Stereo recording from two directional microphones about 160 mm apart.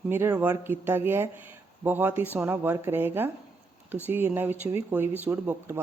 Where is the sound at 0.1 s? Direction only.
10° right (ahead or behind).